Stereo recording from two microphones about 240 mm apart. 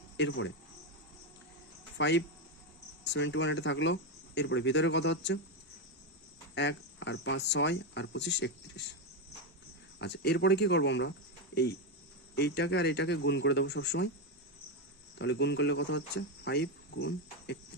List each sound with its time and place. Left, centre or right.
0.2 s speech: left
2.0 s speech: left
6.5 s speech: left
10.0 s speech: left
12.4 s speech: left
15.2 s speech: left